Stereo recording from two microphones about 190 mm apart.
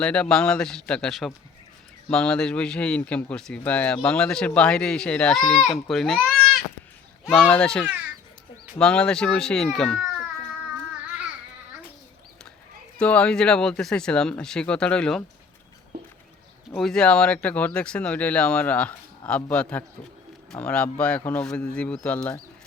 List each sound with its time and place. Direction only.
0.0 s speech: 5° left (ahead or behind)
7.3 s speech: 5° left (ahead or behind)
13.0 s speech: 5° left (ahead or behind)
15.9 s a sound: 55° right (ahead or behind)
16.7 s speech: centre (ahead or behind)